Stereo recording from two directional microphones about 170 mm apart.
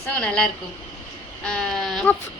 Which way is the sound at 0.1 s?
5° left (ahead or behind).